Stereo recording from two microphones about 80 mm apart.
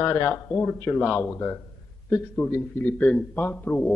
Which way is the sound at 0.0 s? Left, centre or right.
Left.